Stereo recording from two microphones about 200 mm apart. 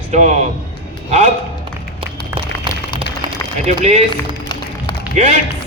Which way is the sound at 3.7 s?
35° right (ahead or behind).